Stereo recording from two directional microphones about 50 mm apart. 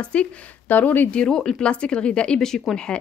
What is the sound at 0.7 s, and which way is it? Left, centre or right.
Speech, left.